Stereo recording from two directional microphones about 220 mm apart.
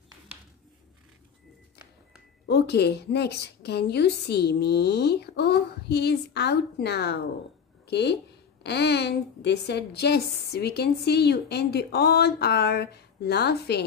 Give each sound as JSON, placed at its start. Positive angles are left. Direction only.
{"t": 2.4, "sound": "a woman's voice", "side_deg": 50}